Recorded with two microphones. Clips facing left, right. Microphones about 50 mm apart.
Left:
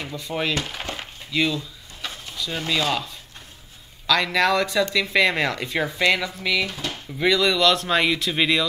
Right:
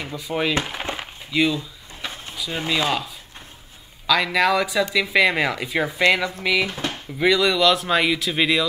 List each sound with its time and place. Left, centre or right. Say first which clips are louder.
0.0 s wood: right 2 dB; centre
0.7 s a sound: right 3 dB; centre
2.3 s speech: right 1 dB; centre
4.1 s speech: right 1 dB; centre
6.6 s speech: right 3 dB; right
7.2 s speech: right 1 dB; centre